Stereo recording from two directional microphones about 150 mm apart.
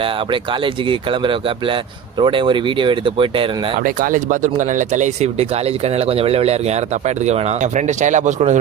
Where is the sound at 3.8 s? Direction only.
65° right (ahead or behind).